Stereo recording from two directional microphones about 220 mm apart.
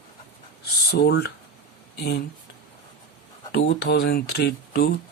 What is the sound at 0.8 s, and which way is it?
Speech, 50° left (ahead or behind).